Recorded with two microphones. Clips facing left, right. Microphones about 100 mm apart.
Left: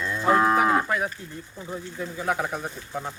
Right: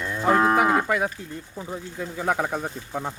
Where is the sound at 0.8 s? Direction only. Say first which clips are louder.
Right 2 dB; 90° right.